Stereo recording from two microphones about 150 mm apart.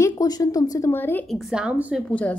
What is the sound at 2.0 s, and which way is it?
Speech, 10° left (ahead or behind).